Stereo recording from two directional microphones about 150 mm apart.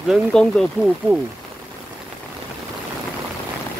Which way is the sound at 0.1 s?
5° left (ahead or behind).